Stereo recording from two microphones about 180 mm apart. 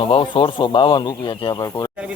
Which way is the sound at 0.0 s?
30° left (ahead or behind).